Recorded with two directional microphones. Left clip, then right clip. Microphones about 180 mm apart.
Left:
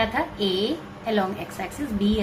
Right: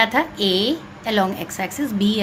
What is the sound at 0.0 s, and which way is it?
A woman's voice, 50° right (ahead or behind).